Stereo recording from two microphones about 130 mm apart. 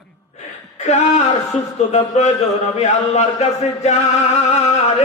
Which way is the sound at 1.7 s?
65° left (ahead or behind).